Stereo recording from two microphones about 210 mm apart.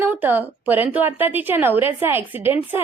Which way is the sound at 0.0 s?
10° right (ahead or behind).